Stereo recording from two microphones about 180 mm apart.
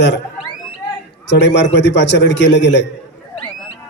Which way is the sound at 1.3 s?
75° left (ahead or behind).